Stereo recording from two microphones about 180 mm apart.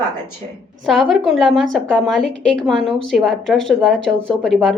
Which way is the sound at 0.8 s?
Centre (ahead or behind).